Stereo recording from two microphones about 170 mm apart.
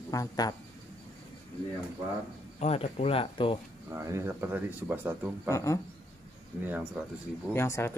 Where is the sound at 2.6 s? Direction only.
40° left (ahead or behind).